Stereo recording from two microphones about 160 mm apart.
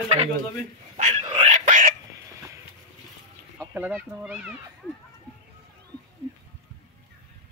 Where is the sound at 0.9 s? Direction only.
45° right (ahead or behind).